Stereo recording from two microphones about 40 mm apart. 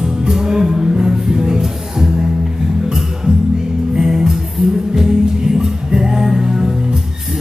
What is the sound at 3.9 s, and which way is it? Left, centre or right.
Music, centre.